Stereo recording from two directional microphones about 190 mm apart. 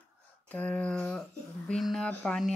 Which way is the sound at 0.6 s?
5° left (ahead or behind).